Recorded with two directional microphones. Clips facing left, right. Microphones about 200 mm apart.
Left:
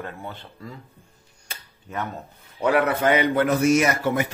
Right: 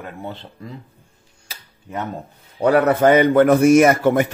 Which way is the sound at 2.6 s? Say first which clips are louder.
Right 6 dB; 40° right (ahead or behind).